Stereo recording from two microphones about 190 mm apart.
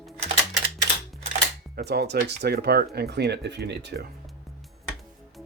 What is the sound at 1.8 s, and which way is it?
Speech, 60° right (ahead or behind).